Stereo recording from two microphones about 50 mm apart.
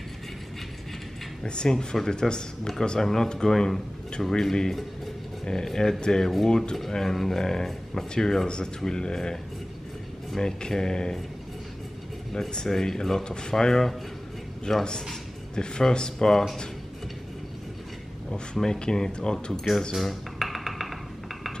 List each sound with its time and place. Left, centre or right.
1.4 s speech: centre
12.4 s a man's voice: centre
18.3 s speech: centre
19.9 s dishes: centre